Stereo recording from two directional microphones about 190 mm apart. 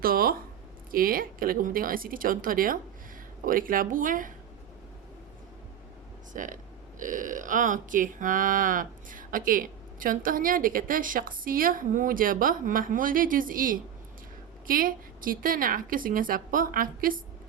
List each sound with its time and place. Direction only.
0.0 s speech: 50° right (ahead or behind)
6.3 s speech: 45° right (ahead or behind)